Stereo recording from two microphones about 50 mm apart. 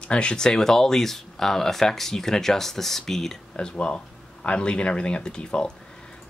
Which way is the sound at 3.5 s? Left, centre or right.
Centre.